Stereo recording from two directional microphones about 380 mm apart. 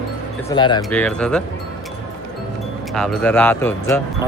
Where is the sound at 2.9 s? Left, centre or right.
Centre.